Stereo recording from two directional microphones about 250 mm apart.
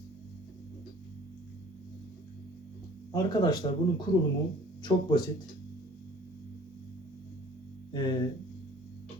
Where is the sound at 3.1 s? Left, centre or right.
Centre.